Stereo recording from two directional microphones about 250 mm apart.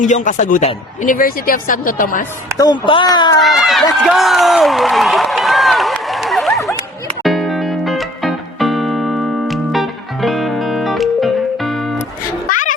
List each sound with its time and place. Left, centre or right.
0.0 s speech: left
2.6 s speech: centre
3.4 s speech: centre
3.9 s a sound: centre
7.3 s music: centre
12.5 s music: left